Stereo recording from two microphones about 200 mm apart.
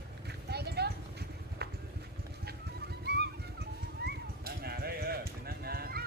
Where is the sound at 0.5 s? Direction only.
55° right (ahead or behind).